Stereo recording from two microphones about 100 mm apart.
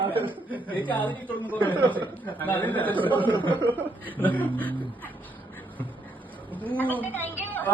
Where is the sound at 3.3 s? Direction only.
55° right (ahead or behind).